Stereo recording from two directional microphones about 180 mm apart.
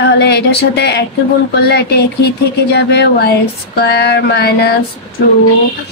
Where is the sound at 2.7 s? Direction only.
70° left (ahead or behind).